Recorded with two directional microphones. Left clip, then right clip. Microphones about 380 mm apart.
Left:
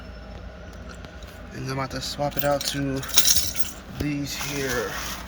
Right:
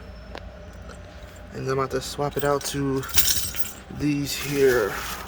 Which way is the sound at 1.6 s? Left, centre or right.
Centre.